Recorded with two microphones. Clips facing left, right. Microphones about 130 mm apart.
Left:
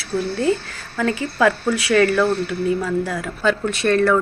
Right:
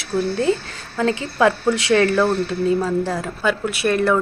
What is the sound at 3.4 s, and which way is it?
Speech, 10° right (ahead or behind).